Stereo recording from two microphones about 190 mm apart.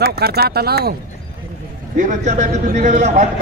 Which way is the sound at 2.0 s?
40° right (ahead or behind).